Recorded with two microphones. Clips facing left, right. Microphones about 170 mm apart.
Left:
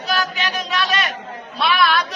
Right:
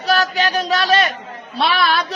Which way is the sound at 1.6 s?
30° right (ahead or behind).